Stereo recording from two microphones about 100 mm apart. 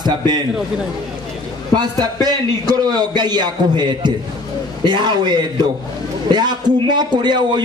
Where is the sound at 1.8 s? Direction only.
45° right (ahead or behind).